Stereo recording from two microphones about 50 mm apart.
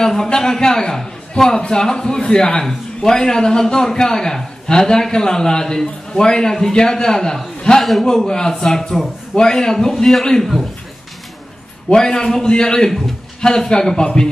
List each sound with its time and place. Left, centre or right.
0.0 s a man's voice: centre
11.9 s a man's voice: centre